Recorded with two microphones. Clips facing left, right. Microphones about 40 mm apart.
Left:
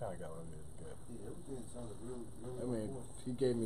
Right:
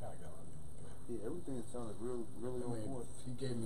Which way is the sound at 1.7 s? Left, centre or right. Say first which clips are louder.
Right 4 dB; centre.